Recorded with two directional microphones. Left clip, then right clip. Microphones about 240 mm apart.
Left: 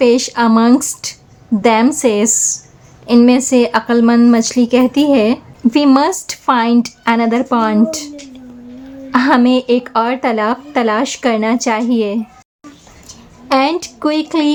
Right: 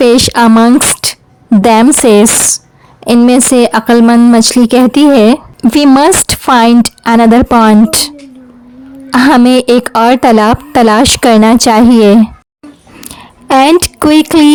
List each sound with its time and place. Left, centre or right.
0.0 s speech: right
9.1 s speech: right
13.5 s speech: right